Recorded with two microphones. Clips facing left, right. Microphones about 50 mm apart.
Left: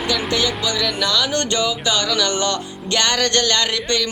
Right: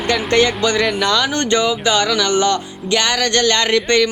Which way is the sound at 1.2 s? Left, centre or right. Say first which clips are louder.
Right 4 dB; right.